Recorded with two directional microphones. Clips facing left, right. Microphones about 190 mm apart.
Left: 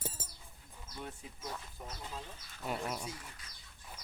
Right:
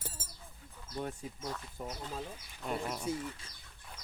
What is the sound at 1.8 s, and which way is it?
Speech, 50° right (ahead or behind).